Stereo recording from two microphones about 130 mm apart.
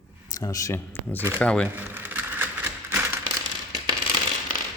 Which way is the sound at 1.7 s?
15° right (ahead or behind).